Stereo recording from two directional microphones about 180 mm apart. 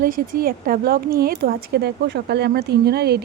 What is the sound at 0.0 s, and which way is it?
A woman's voice, 50° right (ahead or behind).